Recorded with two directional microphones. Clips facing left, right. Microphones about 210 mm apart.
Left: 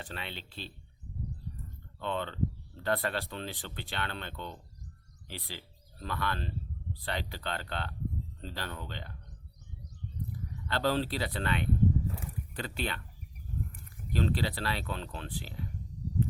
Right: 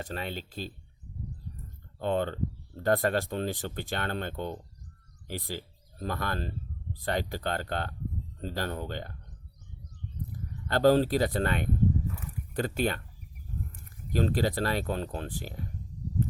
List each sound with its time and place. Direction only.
0.0 s speech: 45° right (ahead or behind)
2.0 s speech: 45° right (ahead or behind)
10.7 s speech: 45° right (ahead or behind)
14.1 s speech: 45° right (ahead or behind)